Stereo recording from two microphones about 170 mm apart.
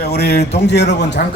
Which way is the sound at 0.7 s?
85° left.